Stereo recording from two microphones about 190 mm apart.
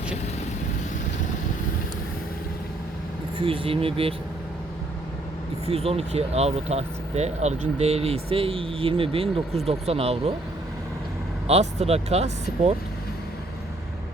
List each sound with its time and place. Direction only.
3.3 s speech: 30° right (ahead or behind)
5.6 s speech: 35° right (ahead or behind)
11.4 s speech: 35° right (ahead or behind)